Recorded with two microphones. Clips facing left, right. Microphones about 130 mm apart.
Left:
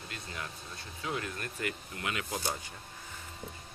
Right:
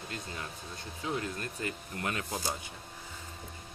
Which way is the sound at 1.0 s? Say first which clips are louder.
Right 2 dB; 25° right (ahead or behind).